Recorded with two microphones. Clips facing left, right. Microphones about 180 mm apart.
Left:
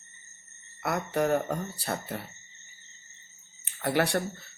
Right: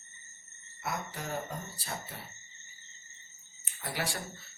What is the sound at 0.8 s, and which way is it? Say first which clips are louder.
Speech: left 11 dB; 65° left (ahead or behind).